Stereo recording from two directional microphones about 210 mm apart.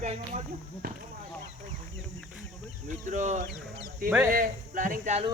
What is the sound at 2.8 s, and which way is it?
Speech, 35° right (ahead or behind).